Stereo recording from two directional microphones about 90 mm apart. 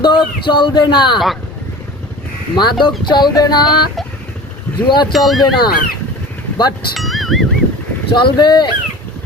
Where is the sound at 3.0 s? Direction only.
55° left (ahead or behind).